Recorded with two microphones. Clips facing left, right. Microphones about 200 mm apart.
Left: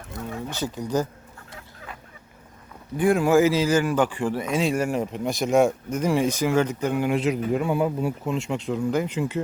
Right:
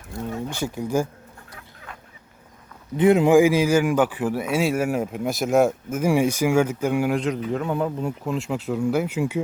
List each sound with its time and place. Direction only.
0.3 s speech: 10° right (ahead or behind)
3.0 s speech: 20° right (ahead or behind)
7.2 s speech: 10° left (ahead or behind); by 9.4 s 10° right (ahead or behind)